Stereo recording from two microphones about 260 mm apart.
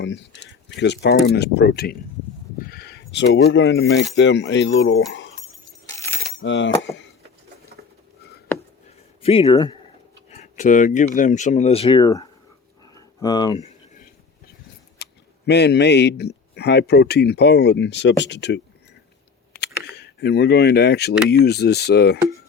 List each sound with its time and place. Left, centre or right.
0.0 s speech: left
6.4 s a sound: left
9.2 s speech: left
12.9 s a sound: centre
15.0 s speech: left
20.0 s speech: left